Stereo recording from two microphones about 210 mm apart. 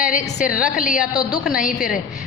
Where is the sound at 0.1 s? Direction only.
40° left (ahead or behind).